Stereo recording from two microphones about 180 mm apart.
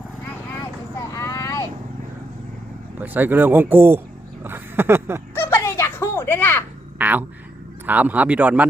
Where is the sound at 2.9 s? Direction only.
10° right (ahead or behind).